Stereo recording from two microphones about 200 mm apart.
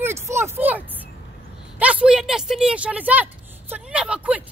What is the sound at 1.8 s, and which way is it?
Speech, 5° right (ahead or behind).